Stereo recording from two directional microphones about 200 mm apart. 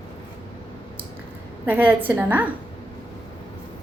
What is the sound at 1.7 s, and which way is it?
Speech, 10° right (ahead or behind).